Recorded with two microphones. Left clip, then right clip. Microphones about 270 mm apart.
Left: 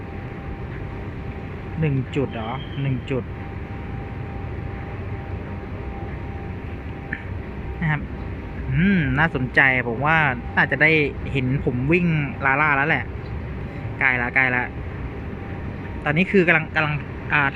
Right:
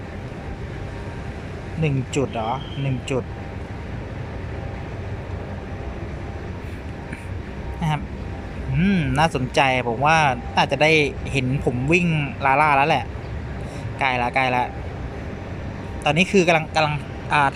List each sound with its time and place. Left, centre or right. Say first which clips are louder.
1.8 s a man's voice: right 1 dB; centre
7.8 s vehicle: even; centre
8.7 s a man's voice: left 1 dB; centre
16.3 s a man's voice: left 3 dB; centre